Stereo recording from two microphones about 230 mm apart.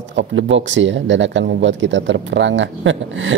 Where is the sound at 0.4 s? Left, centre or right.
Right.